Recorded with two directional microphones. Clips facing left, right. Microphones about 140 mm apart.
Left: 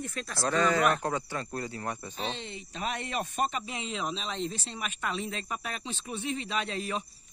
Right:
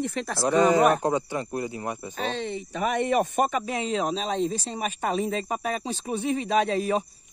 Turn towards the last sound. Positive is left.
turn(degrees=-50)  # may be behind; listen again after turning